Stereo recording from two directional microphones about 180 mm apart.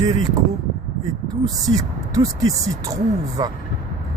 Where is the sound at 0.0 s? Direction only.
20° right (ahead or behind).